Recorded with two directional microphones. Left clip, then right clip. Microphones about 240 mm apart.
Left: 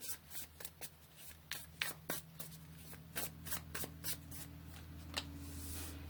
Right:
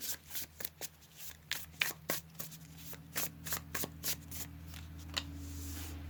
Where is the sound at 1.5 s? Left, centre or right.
Right.